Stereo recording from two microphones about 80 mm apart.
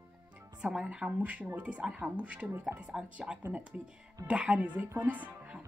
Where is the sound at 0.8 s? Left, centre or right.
Centre.